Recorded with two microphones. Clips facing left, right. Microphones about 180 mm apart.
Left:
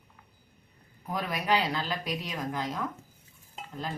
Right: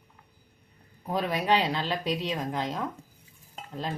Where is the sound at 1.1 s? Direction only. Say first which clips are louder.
Right 3 dB; 30° right (ahead or behind).